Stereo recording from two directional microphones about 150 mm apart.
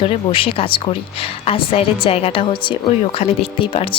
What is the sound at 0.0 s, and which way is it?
Speech, 35° left (ahead or behind).